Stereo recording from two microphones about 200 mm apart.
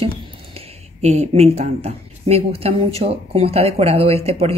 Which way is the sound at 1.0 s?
30° right (ahead or behind).